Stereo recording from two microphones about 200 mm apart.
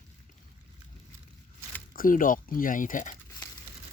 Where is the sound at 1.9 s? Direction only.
45° left (ahead or behind).